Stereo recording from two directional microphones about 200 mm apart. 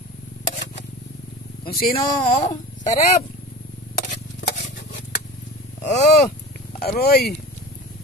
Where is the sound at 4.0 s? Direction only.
55° left (ahead or behind).